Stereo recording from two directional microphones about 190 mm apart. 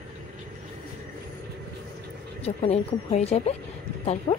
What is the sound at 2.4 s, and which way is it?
A woman's voice, 35° left (ahead or behind).